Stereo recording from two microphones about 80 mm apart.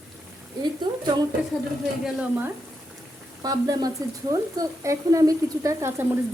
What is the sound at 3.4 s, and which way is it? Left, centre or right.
A woman's voice, right.